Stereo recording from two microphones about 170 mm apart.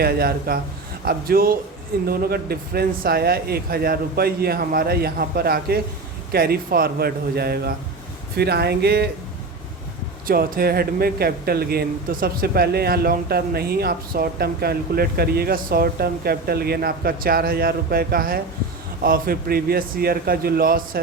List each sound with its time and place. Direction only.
0.0 s speech: 65° right (ahead or behind)
10.2 s speech: 60° right (ahead or behind)